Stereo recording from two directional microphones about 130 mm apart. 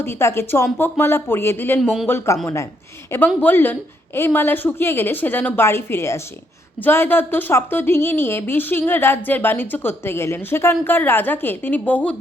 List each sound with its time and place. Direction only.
0.0 s a woman's voice: 20° left (ahead or behind)
1.8 s speech: centre (ahead or behind)
2.0 s a woman's voice: 20° left (ahead or behind)